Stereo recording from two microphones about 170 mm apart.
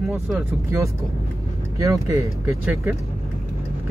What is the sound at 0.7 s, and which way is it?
Speech, 15° right (ahead or behind).